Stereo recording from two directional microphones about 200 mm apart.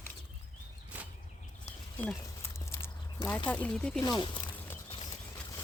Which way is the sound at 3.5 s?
5° left (ahead or behind).